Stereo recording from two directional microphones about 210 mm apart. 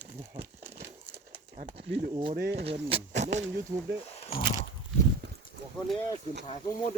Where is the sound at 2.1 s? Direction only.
25° right (ahead or behind).